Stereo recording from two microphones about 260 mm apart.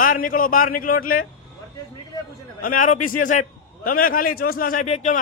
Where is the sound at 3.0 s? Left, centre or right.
Left.